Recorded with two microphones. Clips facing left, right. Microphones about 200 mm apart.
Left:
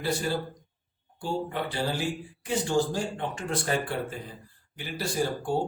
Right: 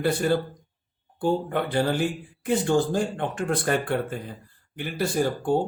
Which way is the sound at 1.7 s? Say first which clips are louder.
Right 7 dB; 55° right (ahead or behind).